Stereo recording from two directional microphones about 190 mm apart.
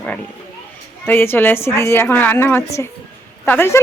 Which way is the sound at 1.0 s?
10° left (ahead or behind).